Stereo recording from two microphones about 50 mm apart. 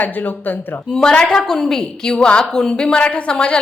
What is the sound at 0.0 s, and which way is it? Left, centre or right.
Speech, left.